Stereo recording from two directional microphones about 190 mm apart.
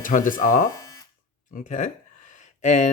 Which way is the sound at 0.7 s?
15° left (ahead or behind).